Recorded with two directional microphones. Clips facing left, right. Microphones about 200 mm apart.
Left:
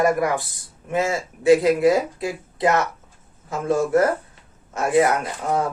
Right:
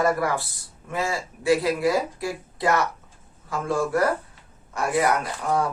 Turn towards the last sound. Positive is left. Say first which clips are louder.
# left 1 dB
turn(degrees=20)  # may be behind; listen again after turning